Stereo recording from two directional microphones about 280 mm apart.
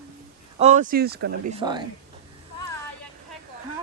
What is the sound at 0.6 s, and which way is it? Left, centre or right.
Speech, right.